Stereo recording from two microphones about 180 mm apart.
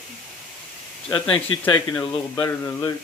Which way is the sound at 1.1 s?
30° left (ahead or behind).